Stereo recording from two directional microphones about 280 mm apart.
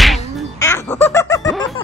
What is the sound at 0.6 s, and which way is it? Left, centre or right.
Baby laughter, centre.